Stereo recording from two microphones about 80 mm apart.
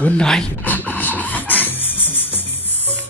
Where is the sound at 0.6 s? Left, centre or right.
Left.